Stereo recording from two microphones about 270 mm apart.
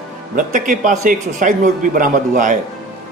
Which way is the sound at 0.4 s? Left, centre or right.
Right.